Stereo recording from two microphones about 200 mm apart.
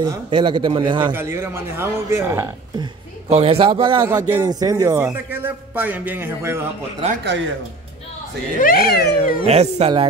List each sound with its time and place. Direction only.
0.0 s a man's voice: 20° right (ahead or behind)
1.1 s a man's voice: 10° right (ahead or behind)
3.3 s a man's voice: 30° right (ahead or behind)
4.0 s a man's voice: 15° right (ahead or behind)
8.5 s speech: 45° left (ahead or behind)
9.4 s speech: 30° right (ahead or behind)